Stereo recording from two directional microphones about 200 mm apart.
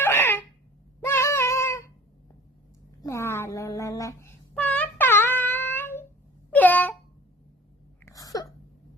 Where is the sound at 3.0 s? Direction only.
15° left (ahead or behind).